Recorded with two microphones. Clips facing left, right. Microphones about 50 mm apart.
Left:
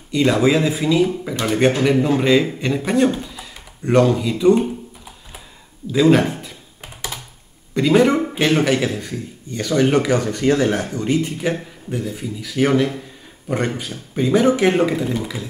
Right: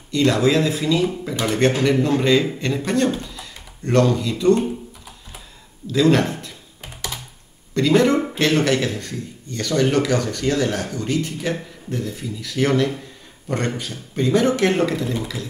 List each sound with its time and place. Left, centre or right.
0.1 s a man's voice: centre
5.9 s computer keyboard: centre
7.7 s a man's voice: centre